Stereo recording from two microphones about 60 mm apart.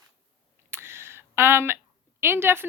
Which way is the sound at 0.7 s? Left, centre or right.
Right.